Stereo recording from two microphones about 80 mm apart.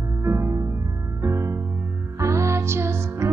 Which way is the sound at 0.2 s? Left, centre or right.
Right.